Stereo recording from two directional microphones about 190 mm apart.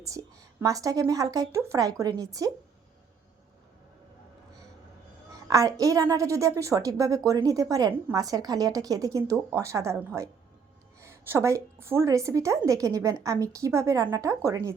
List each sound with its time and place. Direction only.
0.0 s a woman's voice: 15° right (ahead or behind)
5.5 s a woman's voice: 20° right (ahead or behind)